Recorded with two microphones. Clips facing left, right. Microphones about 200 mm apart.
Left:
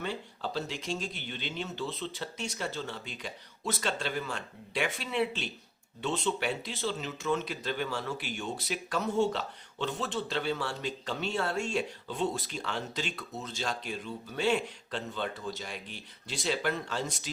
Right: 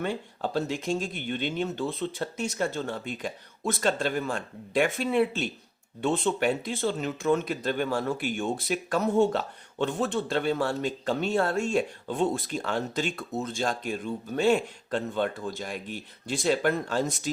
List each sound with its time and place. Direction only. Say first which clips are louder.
0.0 s speech: right 5 dB; 50° right (ahead or behind)